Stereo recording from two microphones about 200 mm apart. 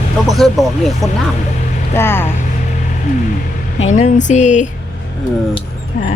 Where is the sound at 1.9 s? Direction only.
10° left (ahead or behind).